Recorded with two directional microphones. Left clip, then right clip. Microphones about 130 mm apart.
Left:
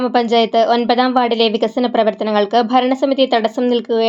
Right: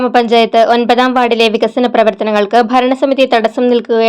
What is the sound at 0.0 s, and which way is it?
Speech, 30° right (ahead or behind).